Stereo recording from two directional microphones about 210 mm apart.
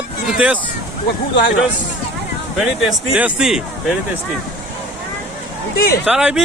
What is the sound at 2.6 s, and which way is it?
Speech, 5° right (ahead or behind).